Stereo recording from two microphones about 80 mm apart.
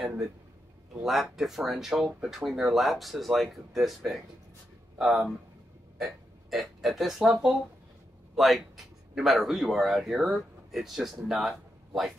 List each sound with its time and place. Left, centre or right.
1.0 s speech: centre